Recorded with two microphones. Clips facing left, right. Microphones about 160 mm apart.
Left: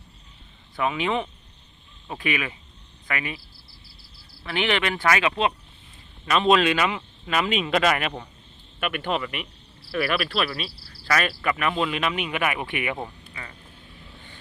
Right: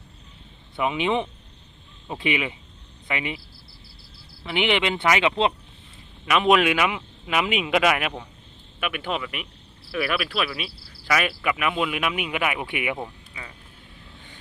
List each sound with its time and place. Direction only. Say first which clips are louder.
0.8 s speech: right 1 dB; 20° right (ahead or behind)
4.4 s speech: right 2 dB; 20° right (ahead or behind)